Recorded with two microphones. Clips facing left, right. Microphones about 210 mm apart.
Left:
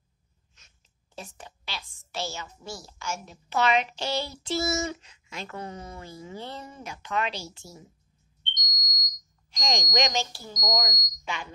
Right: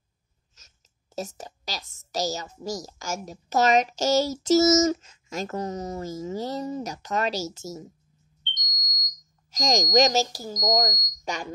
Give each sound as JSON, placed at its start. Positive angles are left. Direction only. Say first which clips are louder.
{"t": 0.6, "sound": "a woman's voice", "louder": "right 3 dB", "side_deg": -40}
{"t": 8.7, "sound": "smoke detector", "louder": "left 1 dB", "side_deg": 0}
{"t": 9.5, "sound": "a woman's voice", "louder": "right 7 dB", "side_deg": -40}